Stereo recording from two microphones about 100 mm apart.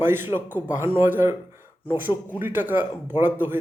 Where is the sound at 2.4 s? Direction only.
20° right (ahead or behind).